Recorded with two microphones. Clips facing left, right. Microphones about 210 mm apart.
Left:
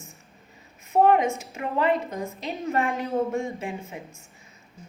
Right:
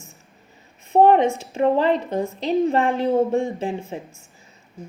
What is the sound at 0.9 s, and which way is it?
A woman's voice, 30° right (ahead or behind).